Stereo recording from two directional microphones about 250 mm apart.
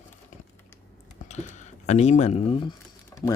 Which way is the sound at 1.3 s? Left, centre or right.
Left.